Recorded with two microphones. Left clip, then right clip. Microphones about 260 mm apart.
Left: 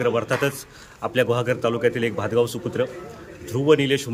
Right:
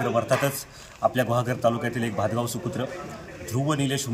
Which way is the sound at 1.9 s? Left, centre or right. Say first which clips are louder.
Left 5 dB; left.